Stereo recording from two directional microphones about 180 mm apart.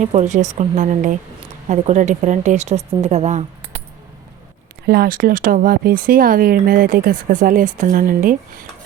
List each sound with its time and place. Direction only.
0.0 s speech: 40° right (ahead or behind)
4.9 s speech: 55° right (ahead or behind)